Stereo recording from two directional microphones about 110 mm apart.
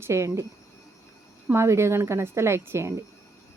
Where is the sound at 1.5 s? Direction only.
25° right (ahead or behind).